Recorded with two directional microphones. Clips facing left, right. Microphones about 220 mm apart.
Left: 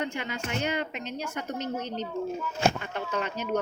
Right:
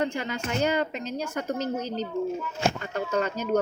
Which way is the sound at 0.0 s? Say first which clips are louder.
Right 4 dB; 40° right (ahead or behind).